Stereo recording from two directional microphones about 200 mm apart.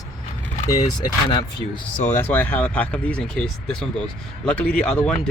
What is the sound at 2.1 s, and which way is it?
Speech, 10° left (ahead or behind).